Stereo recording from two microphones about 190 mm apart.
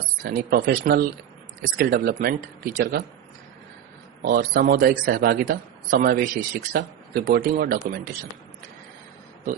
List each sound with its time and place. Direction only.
0.3 s speech: 55° right (ahead or behind)
4.2 s speech: 50° right (ahead or behind)